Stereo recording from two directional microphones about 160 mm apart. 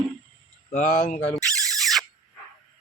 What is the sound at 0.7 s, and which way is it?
Speech, 55° left (ahead or behind).